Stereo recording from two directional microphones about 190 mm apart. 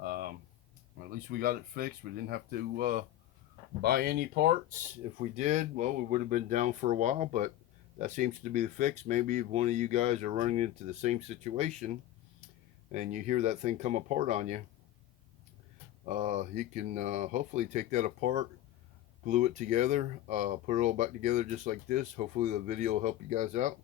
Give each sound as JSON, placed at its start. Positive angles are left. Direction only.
{"t": 0.0, "sound": "a sound", "side_deg": -50}
{"t": 1.0, "sound": "speech", "side_deg": -50}
{"t": 16.0, "sound": "speech", "side_deg": -40}